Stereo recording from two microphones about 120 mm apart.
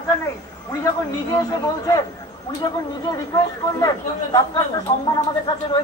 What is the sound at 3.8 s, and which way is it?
A man's voice, 30° left (ahead or behind).